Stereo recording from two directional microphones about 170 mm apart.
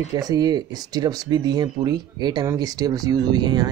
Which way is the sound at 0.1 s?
20° right (ahead or behind).